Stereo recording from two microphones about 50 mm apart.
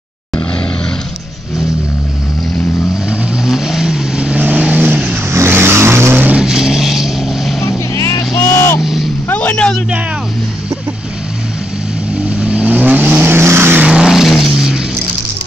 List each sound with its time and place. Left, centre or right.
3.4 s vehicle: centre
4.2 s vehicle: right
5.3 s vehicle: right
6.3 s vehicle: centre
8.4 s vehicle: left
8.8 s vehicle: centre
9.3 s vehicle: left
12.3 s vehicle: right
13.3 s vehicle: right
14.0 s vehicle: centre